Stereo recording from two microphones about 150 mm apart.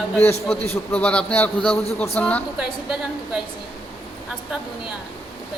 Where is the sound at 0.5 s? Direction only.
40° left (ahead or behind).